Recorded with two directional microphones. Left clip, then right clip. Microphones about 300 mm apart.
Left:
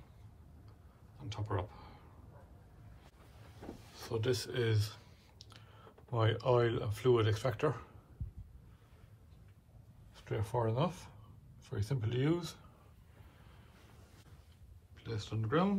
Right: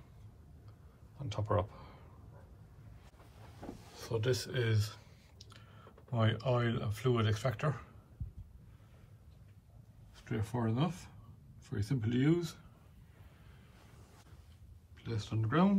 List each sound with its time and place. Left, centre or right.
1.1 s a sound: centre
3.9 s speech: centre
10.1 s speech: centre
15.0 s speech: centre